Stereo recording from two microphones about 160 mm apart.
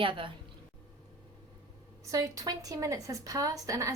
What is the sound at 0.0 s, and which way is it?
Speech, 30° right (ahead or behind).